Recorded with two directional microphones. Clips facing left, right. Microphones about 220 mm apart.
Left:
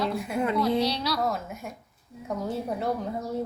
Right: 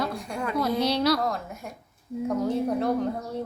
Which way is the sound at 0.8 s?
50° right (ahead or behind).